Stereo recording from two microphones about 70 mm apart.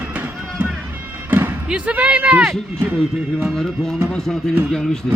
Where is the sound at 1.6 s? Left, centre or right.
Centre.